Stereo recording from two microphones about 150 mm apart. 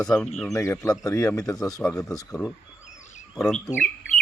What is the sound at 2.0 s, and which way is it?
Speech, 25° left (ahead or behind).